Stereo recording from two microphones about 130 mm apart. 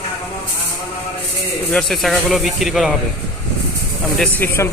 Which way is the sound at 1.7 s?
5° left (ahead or behind).